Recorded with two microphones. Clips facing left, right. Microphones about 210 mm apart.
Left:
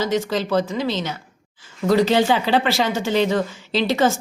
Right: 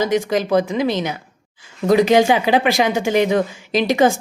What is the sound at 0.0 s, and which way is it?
A woman's voice, 15° right (ahead or behind).